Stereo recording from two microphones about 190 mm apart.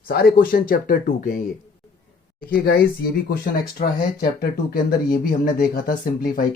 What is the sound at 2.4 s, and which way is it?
Speech, 50° left (ahead or behind).